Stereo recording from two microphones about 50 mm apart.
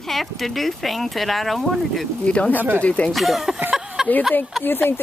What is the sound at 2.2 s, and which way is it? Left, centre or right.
Speech, left.